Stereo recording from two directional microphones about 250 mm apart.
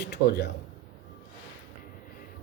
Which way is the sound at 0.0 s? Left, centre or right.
Left.